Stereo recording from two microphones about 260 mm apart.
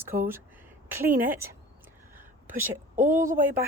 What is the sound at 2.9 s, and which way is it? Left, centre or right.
Speech, centre.